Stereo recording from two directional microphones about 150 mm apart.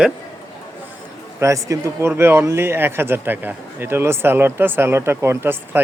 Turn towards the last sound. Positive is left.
turn(degrees=-15)  # may be behind; listen again after turning